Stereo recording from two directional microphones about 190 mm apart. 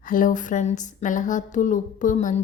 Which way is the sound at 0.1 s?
45° left (ahead or behind).